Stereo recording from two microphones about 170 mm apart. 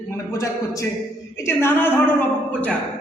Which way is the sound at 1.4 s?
15° left (ahead or behind).